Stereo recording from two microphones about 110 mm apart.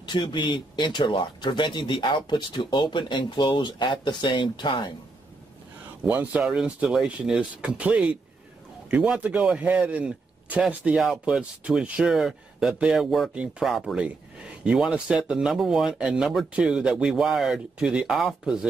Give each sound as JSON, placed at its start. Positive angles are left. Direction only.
{"t": 0.0, "sound": "speech", "side_deg": 45}
{"t": 6.0, "sound": "speech", "side_deg": -15}